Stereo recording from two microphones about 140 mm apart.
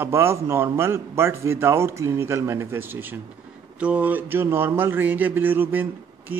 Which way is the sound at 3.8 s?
10° right (ahead or behind).